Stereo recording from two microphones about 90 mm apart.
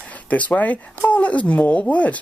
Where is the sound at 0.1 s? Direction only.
15° left (ahead or behind).